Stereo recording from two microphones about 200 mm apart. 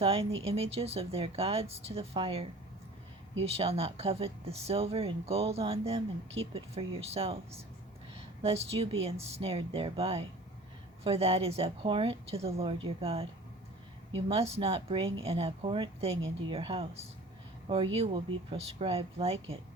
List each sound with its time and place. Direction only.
0.0 s speech: 30° right (ahead or behind)
14.3 s speech: 30° right (ahead or behind)